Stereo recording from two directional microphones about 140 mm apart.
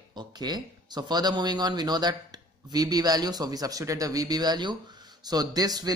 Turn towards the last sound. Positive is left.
turn(degrees=-25)  # may be behind; listen again after turning